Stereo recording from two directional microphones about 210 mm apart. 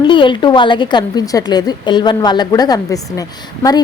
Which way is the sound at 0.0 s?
25° left (ahead or behind).